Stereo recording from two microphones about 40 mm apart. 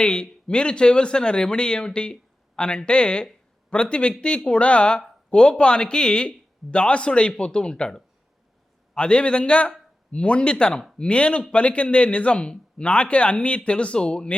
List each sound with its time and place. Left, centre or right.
0.0 s speech: left